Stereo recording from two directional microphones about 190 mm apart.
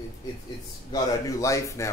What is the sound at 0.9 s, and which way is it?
Speech, 15° left (ahead or behind).